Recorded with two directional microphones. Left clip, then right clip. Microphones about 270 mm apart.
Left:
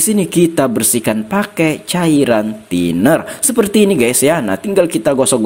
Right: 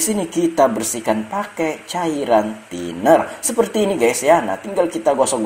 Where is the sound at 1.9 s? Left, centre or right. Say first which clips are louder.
Left 8 dB; left.